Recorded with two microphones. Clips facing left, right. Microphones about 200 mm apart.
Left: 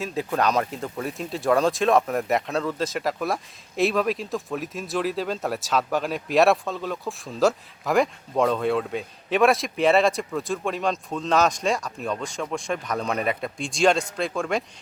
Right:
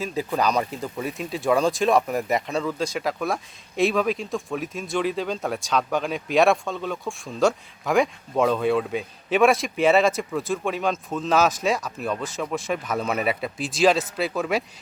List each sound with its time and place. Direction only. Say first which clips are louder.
0.0 s speech: even; centre (ahead or behind)